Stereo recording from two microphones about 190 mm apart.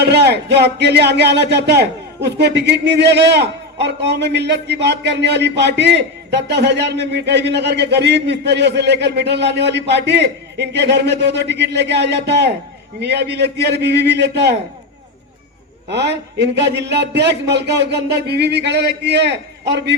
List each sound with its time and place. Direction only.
0.0 s speech: 60° right (ahead or behind)
15.9 s speech: 65° right (ahead or behind)